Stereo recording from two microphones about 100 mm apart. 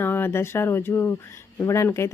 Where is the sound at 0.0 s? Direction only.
20° left (ahead or behind).